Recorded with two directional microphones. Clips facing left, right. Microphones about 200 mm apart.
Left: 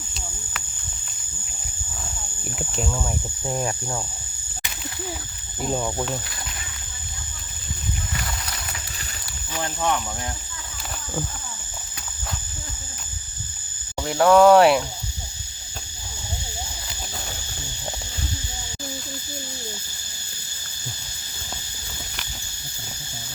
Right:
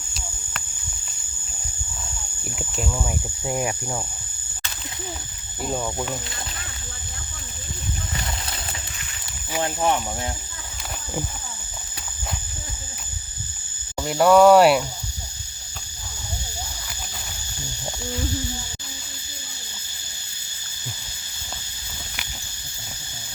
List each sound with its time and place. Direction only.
2.5 s speech: centre (ahead or behind)
5.6 s speech: 5° left (ahead or behind)
9.6 s speech: 25° right (ahead or behind)
14.0 s speech: 5° right (ahead or behind)